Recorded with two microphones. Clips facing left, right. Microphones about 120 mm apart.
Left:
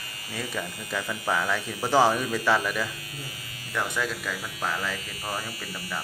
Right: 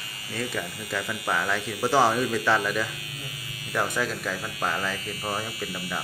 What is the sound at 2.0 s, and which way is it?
Speech, 10° right (ahead or behind).